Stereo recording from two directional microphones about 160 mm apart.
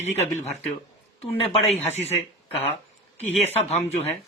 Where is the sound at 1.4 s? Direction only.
40° left (ahead or behind).